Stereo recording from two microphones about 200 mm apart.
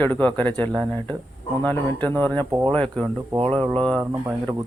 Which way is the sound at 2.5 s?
20° right (ahead or behind).